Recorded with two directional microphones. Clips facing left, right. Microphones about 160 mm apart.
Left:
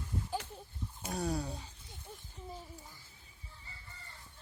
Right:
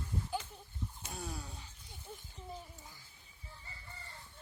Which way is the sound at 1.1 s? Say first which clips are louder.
Left 12 dB; 40° left (ahead or behind).